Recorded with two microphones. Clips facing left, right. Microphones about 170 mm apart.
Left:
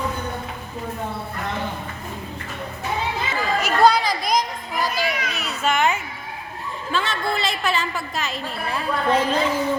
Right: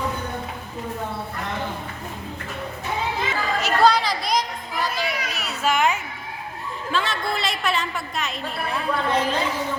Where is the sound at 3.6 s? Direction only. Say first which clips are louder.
Left 1 dB; 10° left (ahead or behind).